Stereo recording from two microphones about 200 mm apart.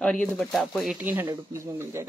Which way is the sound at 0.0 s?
5° left (ahead or behind).